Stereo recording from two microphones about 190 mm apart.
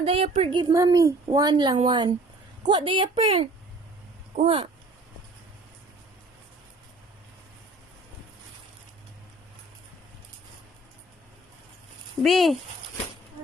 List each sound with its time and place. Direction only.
0.0 s speech: 30° right (ahead or behind)
12.2 s speech: centre (ahead or behind)